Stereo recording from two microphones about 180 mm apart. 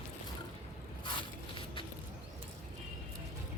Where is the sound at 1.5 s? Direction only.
25° left (ahead or behind).